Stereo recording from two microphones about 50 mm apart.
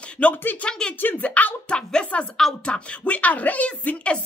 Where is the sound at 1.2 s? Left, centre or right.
Left.